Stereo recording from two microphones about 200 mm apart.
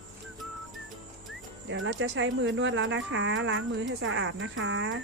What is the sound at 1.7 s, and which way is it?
Speech, 65° right (ahead or behind).